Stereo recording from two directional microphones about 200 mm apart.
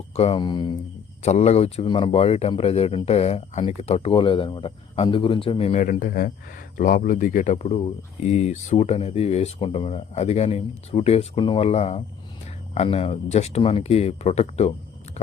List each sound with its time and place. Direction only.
0.1 s speech: 30° left (ahead or behind)